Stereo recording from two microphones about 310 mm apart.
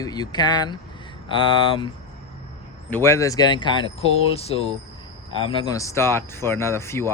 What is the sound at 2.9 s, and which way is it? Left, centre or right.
Speech, centre.